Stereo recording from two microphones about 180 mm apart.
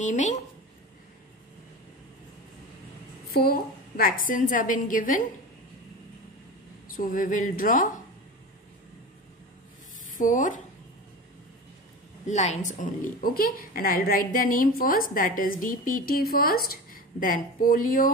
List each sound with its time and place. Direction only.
0.0 s a woman's voice: 40° left (ahead or behind)
3.3 s a woman's voice: 55° left (ahead or behind)
7.0 s a woman's voice: 50° left (ahead or behind)
10.0 s speech: 45° left (ahead or behind)
12.3 s a woman's voice: 40° left (ahead or behind)